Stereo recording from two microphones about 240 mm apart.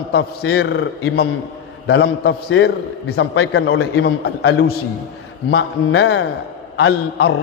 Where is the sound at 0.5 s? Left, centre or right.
Left.